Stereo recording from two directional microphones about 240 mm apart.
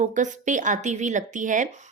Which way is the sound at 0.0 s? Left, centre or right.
Right.